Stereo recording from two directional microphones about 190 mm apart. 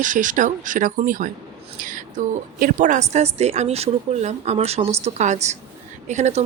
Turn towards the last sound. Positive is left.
turn(degrees=-40)  # may be behind; listen again after turning